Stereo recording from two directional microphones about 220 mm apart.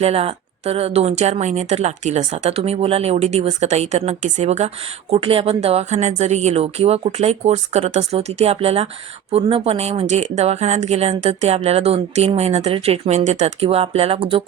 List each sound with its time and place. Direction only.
0.0 s speech: 25° right (ahead or behind)